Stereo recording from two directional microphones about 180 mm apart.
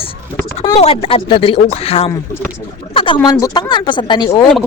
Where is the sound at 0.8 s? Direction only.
30° left (ahead or behind).